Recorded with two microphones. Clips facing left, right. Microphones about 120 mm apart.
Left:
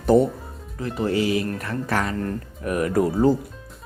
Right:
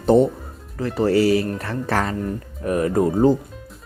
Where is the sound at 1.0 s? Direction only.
40° right (ahead or behind).